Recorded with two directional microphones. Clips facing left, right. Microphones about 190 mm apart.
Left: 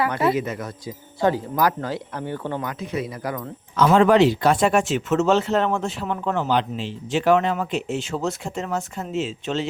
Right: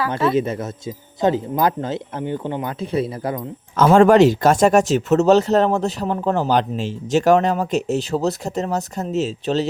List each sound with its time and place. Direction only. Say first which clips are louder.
0.3 s speech: right 5 dB; 30° right (ahead or behind)
3.8 s speech: right 4 dB; 45° right (ahead or behind)